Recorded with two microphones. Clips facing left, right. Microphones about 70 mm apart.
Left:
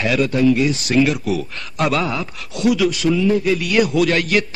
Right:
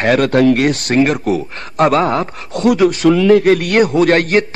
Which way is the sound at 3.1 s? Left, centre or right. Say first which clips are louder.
Right 8 dB; right.